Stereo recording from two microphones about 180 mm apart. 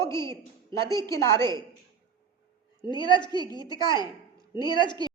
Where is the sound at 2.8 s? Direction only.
25° left (ahead or behind).